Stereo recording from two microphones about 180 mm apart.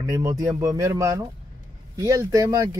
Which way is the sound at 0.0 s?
20° right (ahead or behind).